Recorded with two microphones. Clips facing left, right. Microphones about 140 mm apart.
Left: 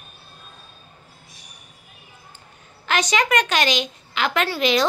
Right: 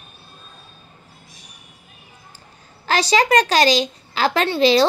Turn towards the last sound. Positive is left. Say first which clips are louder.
# right 5 dB
turn(degrees=-30)  # may be behind; listen again after turning